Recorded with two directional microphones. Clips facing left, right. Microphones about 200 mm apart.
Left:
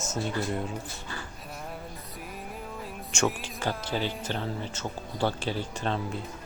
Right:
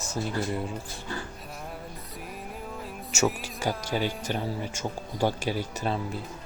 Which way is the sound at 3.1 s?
5° right (ahead or behind).